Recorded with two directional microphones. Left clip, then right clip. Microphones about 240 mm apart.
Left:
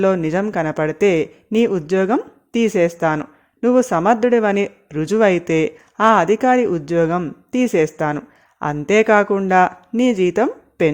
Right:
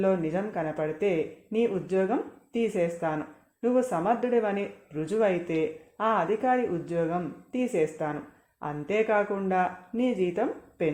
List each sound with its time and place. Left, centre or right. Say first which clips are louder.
0.0 s speech: left 9 dB; left